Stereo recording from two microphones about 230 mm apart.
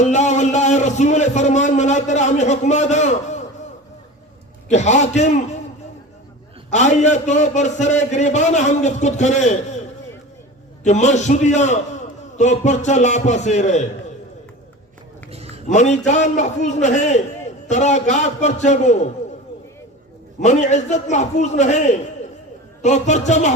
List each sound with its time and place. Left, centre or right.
0.0 s a man's voice: left
4.7 s a man's voice: left
6.7 s a man's voice: left
15.3 s a sound: right
15.7 s a man's voice: left
20.4 s a man's voice: left